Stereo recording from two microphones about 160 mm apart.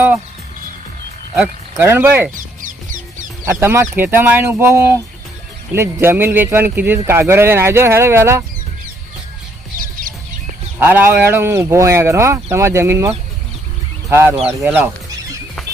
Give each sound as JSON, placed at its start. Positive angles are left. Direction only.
{"t": 1.7, "sound": "speech", "side_deg": -15}
{"t": 2.3, "sound": "a sound", "side_deg": -55}
{"t": 3.4, "sound": "speech", "side_deg": -15}
{"t": 10.8, "sound": "speech", "side_deg": -15}